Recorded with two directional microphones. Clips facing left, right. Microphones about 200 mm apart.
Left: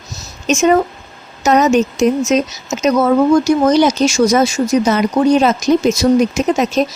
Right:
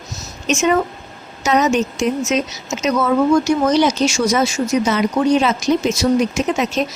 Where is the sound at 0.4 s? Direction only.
40° left (ahead or behind).